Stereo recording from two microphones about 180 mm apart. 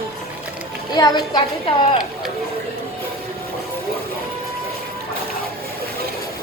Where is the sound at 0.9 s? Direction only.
25° left (ahead or behind).